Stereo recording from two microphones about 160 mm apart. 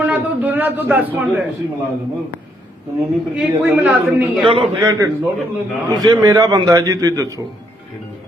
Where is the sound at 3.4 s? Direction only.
10° right (ahead or behind).